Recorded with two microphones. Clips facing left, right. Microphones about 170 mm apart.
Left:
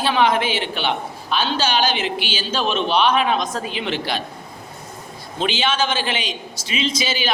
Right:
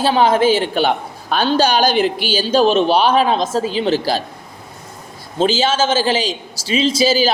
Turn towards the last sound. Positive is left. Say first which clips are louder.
# right 9 dB
turn(degrees=-35)  # may be behind; listen again after turning